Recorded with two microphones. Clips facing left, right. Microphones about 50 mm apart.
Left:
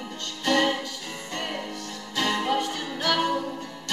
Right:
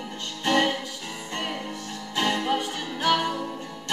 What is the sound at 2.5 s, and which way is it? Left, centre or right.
Music, centre.